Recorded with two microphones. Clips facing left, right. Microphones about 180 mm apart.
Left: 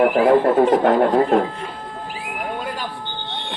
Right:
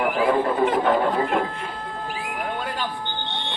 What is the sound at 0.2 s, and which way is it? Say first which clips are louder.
Speech: left 4 dB; 45° left (ahead or behind).